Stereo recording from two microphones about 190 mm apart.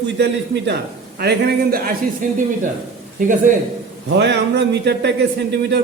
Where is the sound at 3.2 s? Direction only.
45° right (ahead or behind).